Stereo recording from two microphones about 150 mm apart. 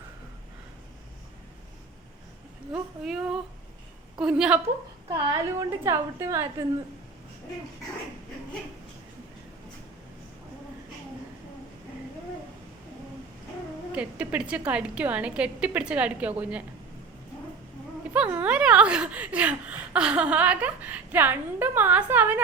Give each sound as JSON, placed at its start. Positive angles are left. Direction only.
{"t": 2.7, "sound": "speech", "side_deg": -5}
{"t": 5.0, "sound": "a woman's voice", "side_deg": -25}
{"t": 13.9, "sound": "speech", "side_deg": -10}
{"t": 18.1, "sound": "speech", "side_deg": -10}